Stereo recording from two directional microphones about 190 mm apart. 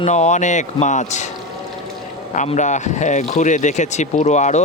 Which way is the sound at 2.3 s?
40° left (ahead or behind).